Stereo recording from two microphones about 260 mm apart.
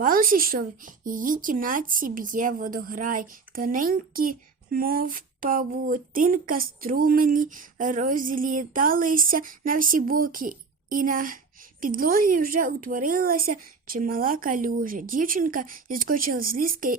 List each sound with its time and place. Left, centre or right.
0.0 s speech: right